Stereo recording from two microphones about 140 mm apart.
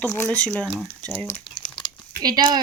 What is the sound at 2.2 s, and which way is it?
Speech, 30° right (ahead or behind).